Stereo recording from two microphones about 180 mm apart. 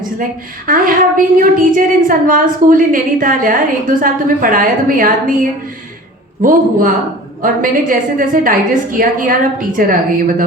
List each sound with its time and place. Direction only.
0.7 s a woman's voice: 50° right (ahead or behind)